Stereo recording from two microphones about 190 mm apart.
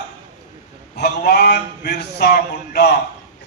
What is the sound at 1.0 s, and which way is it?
A man's voice, 60° left (ahead or behind).